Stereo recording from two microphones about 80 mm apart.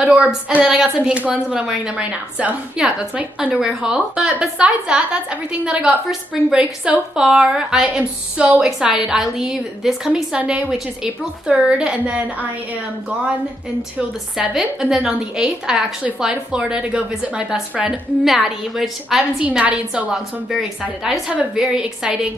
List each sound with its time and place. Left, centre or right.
0.0 s a woman's voice: centre
3.5 s a woman's voice: centre
14.5 s a woman's voice: centre
18.2 s a woman's voice: centre
19.4 s a woman's voice: centre
21.3 s a woman's voice: centre